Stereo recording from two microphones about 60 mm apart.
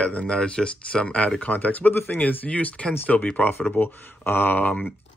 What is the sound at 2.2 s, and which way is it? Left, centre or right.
Speech, left.